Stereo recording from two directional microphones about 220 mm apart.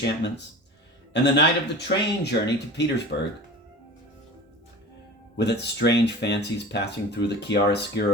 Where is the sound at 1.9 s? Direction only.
50° left (ahead or behind).